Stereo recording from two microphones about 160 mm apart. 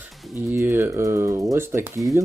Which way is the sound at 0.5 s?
15° right (ahead or behind).